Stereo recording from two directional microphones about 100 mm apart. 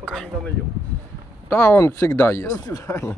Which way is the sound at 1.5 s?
25° left (ahead or behind).